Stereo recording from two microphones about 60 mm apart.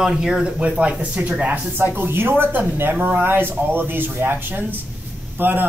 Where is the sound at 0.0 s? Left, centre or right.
Centre.